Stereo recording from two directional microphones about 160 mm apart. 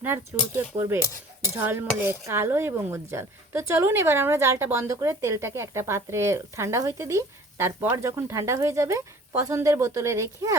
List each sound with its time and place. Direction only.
0.0 s dishes: 10° right (ahead or behind)